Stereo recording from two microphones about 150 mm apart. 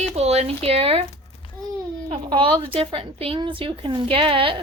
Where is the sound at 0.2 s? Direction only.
45° right (ahead or behind).